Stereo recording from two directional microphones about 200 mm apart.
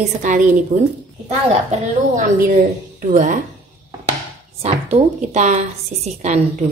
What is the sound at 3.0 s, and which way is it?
Speech, 40° right (ahead or behind).